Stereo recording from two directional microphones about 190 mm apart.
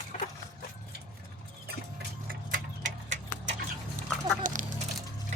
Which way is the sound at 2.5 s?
40° right (ahead or behind).